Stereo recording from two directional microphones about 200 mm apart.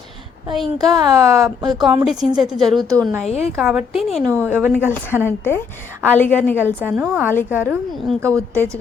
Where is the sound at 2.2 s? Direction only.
5° right (ahead or behind).